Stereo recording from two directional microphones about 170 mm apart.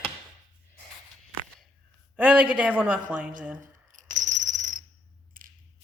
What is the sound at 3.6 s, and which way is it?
Coin, 50° right (ahead or behind).